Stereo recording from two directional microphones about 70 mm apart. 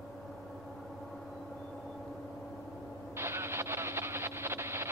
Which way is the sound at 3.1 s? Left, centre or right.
Right.